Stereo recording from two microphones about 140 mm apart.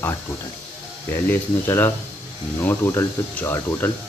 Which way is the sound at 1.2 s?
15° left (ahead or behind).